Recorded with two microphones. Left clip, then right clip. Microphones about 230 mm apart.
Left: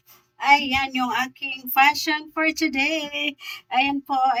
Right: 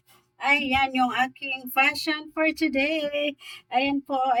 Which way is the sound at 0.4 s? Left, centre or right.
Centre.